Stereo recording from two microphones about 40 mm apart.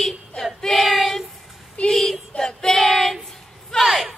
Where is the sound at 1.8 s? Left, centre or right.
Left.